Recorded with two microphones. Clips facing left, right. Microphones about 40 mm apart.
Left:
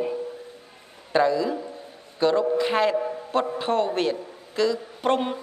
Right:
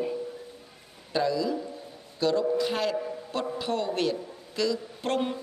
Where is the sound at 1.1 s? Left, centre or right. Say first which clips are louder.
Left 5 dB; left.